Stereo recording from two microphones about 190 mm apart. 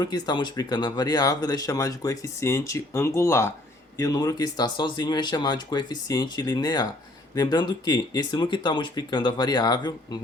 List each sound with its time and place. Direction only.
0.0 s speech: 20° left (ahead or behind)